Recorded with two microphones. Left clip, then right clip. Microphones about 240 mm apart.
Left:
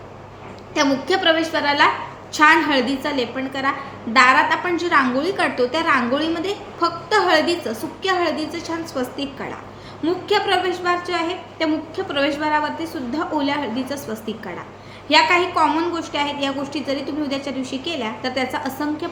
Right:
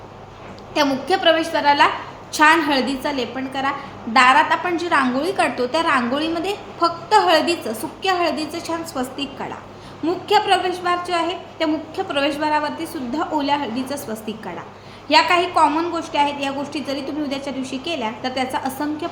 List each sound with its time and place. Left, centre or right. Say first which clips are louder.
0.7 s a woman's voice: even; centre